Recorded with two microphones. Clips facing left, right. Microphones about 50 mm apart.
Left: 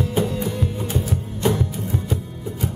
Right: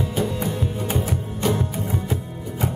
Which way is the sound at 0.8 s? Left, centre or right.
Right.